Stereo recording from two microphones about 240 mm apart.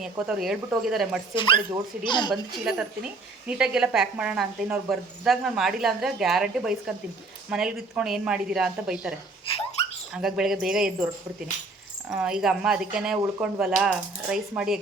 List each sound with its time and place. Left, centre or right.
0.0 s a woman's voice: centre
2.0 s speech: centre
2.3 s a woman's voice: centre
9.5 s speech: left
10.2 s a woman's voice: centre
12.1 s a woman's voice: centre